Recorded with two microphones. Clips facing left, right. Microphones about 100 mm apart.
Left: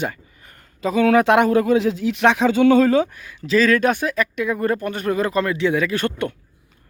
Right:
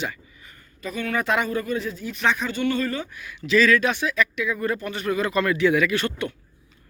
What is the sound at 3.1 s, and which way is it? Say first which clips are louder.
Speech: left 2 dB; 35° left (ahead or behind).